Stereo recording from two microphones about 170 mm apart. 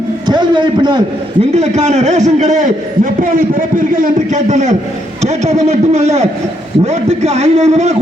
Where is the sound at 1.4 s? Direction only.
40° right (ahead or behind).